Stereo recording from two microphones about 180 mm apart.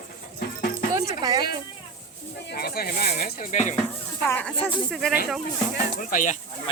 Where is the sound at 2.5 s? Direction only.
60° left (ahead or behind).